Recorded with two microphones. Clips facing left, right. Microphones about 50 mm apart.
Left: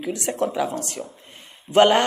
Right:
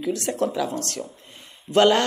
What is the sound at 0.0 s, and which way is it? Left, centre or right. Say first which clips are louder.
A man's voice: even; left.